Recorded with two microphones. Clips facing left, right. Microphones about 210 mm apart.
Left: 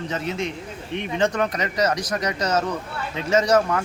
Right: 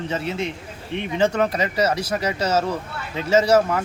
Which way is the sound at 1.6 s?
10° right (ahead or behind).